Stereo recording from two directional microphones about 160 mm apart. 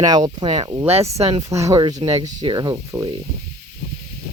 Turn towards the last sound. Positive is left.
turn(degrees=-25)  # may be behind; listen again after turning